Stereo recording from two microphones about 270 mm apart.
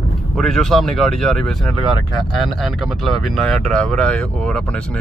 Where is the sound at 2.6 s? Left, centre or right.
Centre.